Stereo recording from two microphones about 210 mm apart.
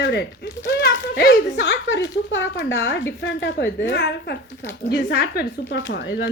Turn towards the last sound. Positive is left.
turn(degrees=60)  # may be behind; listen again after turning